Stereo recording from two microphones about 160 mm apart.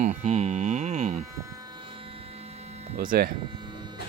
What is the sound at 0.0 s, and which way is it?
Music, 45° right (ahead or behind).